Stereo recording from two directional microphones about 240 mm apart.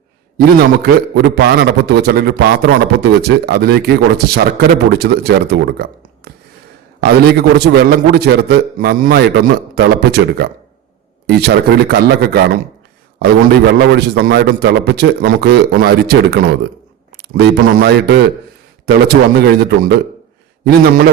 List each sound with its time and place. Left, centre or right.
0.3 s a man's voice: right
13.7 s a man's voice: right